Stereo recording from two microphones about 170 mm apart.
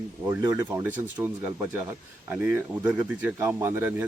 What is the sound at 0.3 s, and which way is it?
Speech, 15° right (ahead or behind).